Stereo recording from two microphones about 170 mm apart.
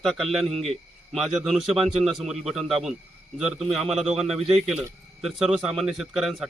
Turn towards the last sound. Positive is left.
turn(degrees=0)  # may be behind; listen again after turning